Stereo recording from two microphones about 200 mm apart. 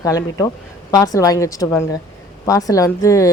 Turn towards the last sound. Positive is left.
turn(degrees=15)  # may be behind; listen again after turning